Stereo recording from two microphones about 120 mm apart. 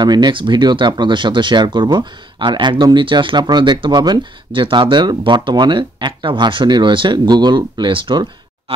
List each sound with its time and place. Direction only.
0.0 s speech: 35° right (ahead or behind)